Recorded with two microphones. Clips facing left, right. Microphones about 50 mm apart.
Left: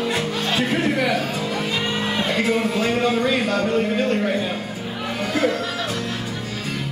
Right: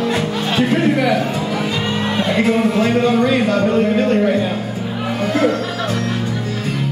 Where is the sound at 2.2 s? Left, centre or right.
Centre.